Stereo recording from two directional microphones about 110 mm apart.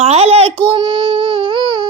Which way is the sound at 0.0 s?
70° right (ahead or behind).